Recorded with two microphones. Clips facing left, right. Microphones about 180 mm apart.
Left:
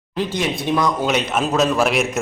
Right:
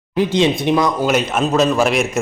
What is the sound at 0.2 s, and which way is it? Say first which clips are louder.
Speech: right 7 dB; 20° right (ahead or behind).